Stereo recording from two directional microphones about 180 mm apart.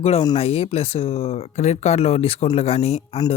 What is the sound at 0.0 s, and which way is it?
Speech, 35° left (ahead or behind).